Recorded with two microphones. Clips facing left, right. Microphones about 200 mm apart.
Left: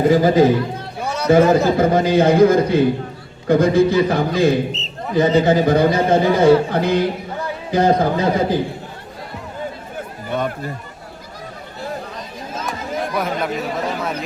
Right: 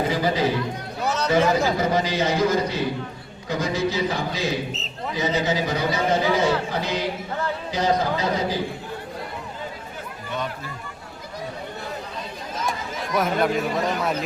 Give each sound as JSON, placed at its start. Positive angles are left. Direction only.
{"t": 0.1, "sound": "a man's voice", "side_deg": 50}
{"t": 1.0, "sound": "a sound", "side_deg": 10}
{"t": 1.3, "sound": "a man's voice", "side_deg": 50}
{"t": 10.2, "sound": "chatter", "side_deg": 50}
{"t": 13.1, "sound": "speech", "side_deg": 0}